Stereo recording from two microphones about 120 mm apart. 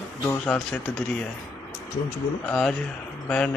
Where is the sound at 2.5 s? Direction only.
5° left (ahead or behind).